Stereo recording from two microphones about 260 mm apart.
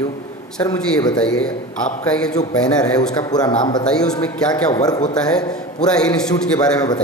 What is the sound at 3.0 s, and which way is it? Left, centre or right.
Speech, centre.